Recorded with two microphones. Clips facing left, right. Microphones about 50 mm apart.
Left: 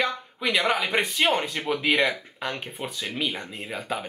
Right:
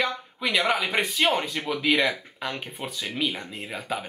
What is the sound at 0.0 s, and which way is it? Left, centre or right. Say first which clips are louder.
Speech: left 1 dB; centre.